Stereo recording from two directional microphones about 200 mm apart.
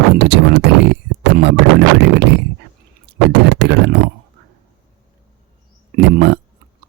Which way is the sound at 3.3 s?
60° right (ahead or behind).